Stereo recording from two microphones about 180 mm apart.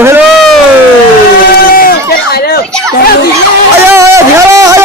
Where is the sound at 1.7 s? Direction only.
55° left (ahead or behind).